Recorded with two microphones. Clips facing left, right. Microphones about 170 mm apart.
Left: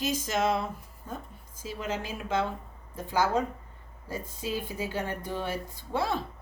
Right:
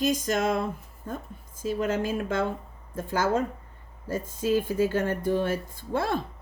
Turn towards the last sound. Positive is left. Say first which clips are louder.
# right 2 dB
turn(degrees=-50)  # may be behind; listen again after turning